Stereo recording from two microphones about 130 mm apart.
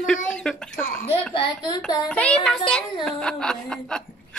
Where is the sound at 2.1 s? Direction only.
10° left (ahead or behind).